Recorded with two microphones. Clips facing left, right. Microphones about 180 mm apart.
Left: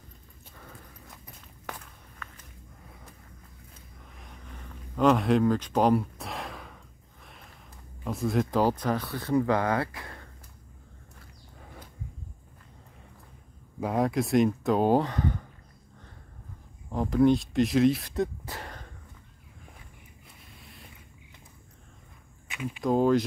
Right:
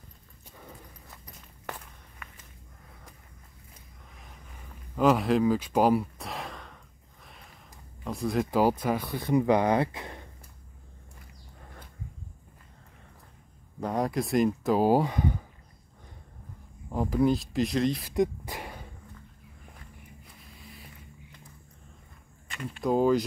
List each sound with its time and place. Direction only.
1.0 s walk: centre (ahead or behind)
4.2 s a sound: 5° right (ahead or behind)
8.0 s speech: centre (ahead or behind); by 10.3 s 20° right (ahead or behind)
13.7 s speech: 5° left (ahead or behind)
16.9 s speech: 5° right (ahead or behind)
18.1 s a sound: 15° right (ahead or behind)
20.3 s vehicle: centre (ahead or behind)
22.5 s speech: 5° left (ahead or behind)